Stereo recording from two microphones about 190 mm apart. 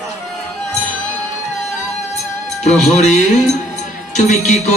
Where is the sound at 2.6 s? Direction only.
35° left (ahead or behind).